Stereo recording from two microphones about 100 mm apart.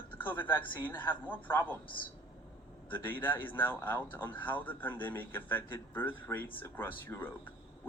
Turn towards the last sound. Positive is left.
turn(degrees=20)  # may be behind; listen again after turning